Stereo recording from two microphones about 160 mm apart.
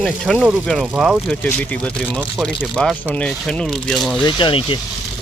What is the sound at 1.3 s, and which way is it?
Speech, 5° left (ahead or behind).